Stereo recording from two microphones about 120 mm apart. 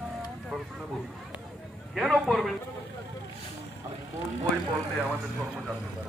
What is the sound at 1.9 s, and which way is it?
Speech, centre (ahead or behind).